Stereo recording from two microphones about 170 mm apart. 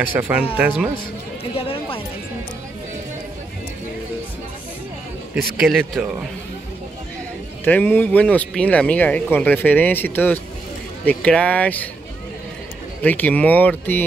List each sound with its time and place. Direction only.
0.1 s speech: 10° right (ahead or behind)
0.9 s a sound: 35° left (ahead or behind)
5.6 s speech: 5° right (ahead or behind)
7.6 s speech: 10° left (ahead or behind)
13.0 s speech: 10° left (ahead or behind)